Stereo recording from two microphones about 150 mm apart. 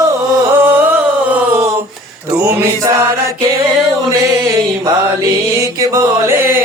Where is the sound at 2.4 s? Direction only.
15° right (ahead or behind).